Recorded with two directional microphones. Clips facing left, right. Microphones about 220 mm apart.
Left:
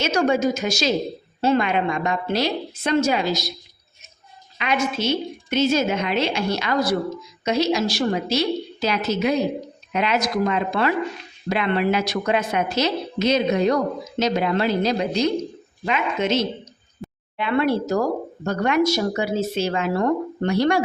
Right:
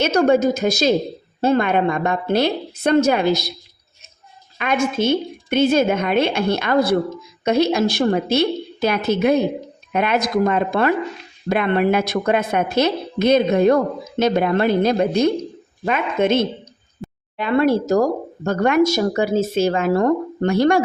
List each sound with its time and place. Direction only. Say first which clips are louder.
0.0 s a woman's voice: right 4 dB; 60° right (ahead or behind)
4.5 s a woman's voice: right 4 dB; 50° right (ahead or behind)
17.3 s a woman's voice: right 4 dB; 40° right (ahead or behind)